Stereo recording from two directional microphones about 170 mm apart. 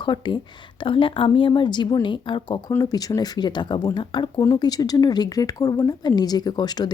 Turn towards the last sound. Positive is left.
turn(degrees=25)  # may be behind; listen again after turning